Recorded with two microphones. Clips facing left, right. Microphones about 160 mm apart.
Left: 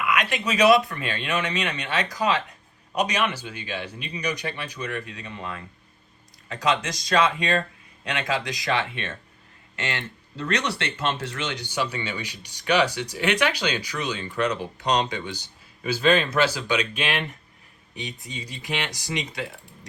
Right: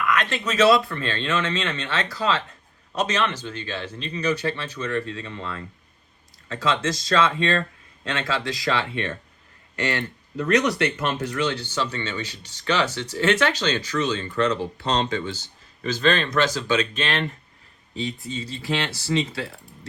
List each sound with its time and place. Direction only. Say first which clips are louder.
0.0 s speech: right 1 dB; 10° left (ahead or behind)